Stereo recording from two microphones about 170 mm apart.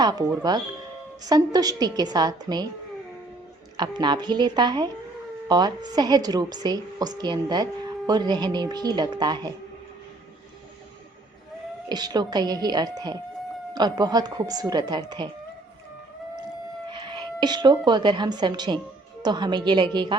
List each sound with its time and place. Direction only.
0.0 s speech: 20° right (ahead or behind)
3.8 s speech: 25° right (ahead or behind)
11.9 s speech: 25° right (ahead or behind)
16.9 s speech: 25° right (ahead or behind)